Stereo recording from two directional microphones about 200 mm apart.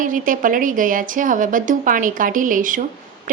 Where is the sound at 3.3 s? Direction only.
40° right (ahead or behind).